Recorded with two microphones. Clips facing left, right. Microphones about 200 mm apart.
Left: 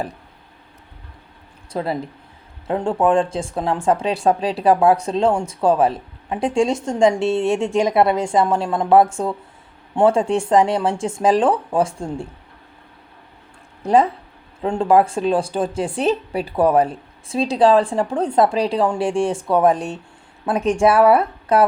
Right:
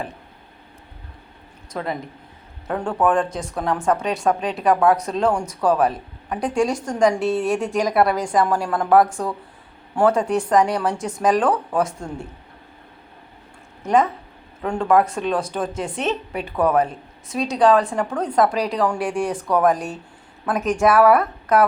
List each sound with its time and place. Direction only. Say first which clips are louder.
1.7 s speech: left 4 dB; 30° left (ahead or behind)
13.8 s speech: left 3 dB; 30° left (ahead or behind)